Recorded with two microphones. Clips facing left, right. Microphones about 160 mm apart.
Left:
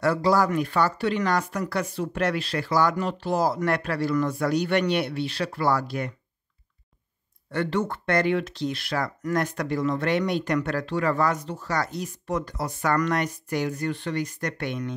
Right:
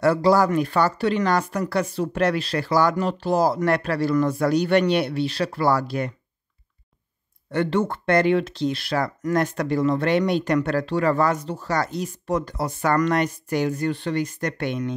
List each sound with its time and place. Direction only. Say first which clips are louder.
0.0 s speech: right 4 dB; 30° right (ahead or behind)
7.5 s speech: right 4 dB; 25° right (ahead or behind)